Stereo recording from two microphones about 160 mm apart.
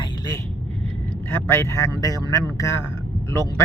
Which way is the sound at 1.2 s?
15° left (ahead or behind).